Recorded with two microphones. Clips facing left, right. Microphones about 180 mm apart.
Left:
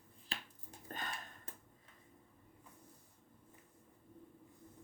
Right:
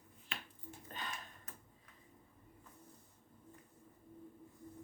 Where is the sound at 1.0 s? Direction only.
50° left (ahead or behind).